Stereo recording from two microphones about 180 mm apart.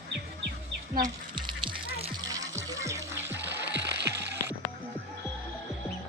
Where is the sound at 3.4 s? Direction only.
75° right (ahead or behind).